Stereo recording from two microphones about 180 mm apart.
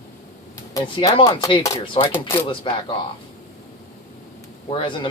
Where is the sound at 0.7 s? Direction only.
25° left (ahead or behind).